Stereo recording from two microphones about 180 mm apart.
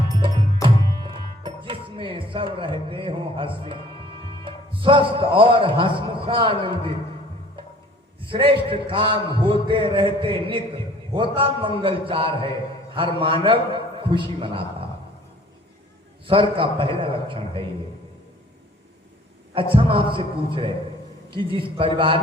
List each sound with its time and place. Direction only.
0.2 s music: 30° right (ahead or behind)
4.4 s a man's voice: 30° right (ahead or behind)
8.3 s a man's voice: 30° right (ahead or behind)
16.2 s a man's voice: 30° right (ahead or behind)
19.5 s a man's voice: 30° right (ahead or behind)
21.8 s a man's voice: 30° right (ahead or behind)